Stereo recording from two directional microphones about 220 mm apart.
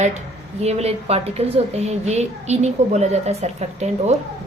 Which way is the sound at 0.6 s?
30° right (ahead or behind).